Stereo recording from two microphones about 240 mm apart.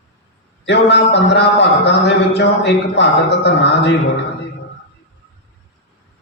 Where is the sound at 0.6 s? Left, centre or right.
Left.